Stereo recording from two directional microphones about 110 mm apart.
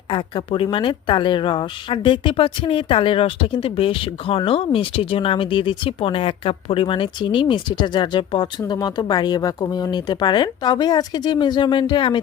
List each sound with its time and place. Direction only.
0.1 s a woman's voice: 50° left (ahead or behind)